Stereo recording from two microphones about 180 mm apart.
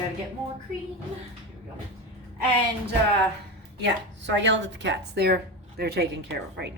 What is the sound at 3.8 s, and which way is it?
A woman's voice, 80° right.